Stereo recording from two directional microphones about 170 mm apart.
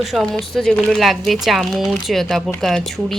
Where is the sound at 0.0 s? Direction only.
Centre (ahead or behind).